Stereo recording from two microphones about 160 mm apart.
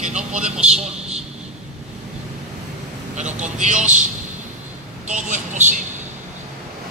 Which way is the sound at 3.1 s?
50° right (ahead or behind).